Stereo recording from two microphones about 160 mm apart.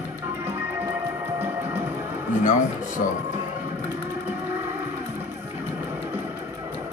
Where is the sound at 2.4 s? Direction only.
55° left (ahead or behind).